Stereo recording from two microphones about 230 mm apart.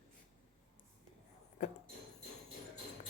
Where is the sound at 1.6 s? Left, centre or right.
Left.